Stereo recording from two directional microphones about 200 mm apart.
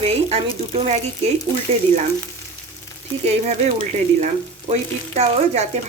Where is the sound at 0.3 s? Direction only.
25° right (ahead or behind).